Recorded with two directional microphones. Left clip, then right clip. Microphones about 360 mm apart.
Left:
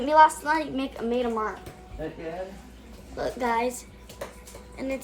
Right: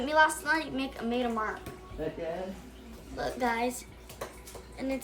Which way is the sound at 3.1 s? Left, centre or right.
Centre.